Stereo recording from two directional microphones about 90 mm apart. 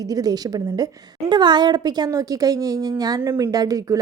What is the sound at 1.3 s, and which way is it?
A woman's voice, 55° right (ahead or behind).